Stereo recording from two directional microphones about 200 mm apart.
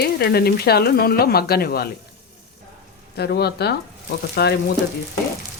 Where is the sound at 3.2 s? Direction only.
55° left (ahead or behind).